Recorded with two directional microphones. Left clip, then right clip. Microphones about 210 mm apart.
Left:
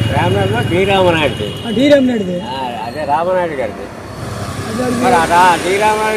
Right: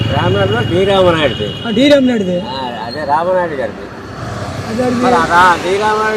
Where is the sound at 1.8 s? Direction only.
25° right (ahead or behind).